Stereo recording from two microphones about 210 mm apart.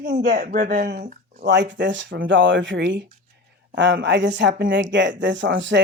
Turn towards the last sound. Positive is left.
turn(degrees=-60)  # may be behind; listen again after turning